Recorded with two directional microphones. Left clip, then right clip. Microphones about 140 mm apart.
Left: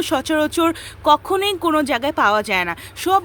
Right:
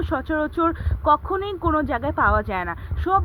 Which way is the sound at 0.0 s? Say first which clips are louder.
Left 5 dB; 25° left (ahead or behind).